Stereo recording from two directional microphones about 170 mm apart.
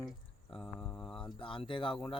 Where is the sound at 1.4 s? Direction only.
30° left (ahead or behind).